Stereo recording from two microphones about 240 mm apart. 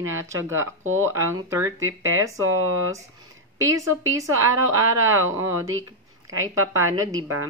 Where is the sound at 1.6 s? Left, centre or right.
Right.